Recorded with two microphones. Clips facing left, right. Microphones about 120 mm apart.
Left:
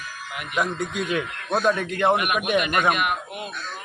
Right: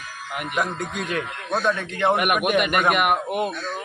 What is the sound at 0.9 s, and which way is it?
Speech, 45° right (ahead or behind).